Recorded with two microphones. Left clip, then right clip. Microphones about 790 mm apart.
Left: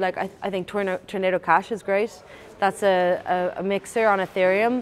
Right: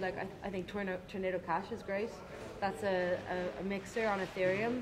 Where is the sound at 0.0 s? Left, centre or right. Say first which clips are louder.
Left 14 dB; left.